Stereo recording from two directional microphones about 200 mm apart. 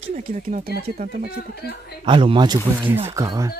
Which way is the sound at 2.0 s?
25° right (ahead or behind).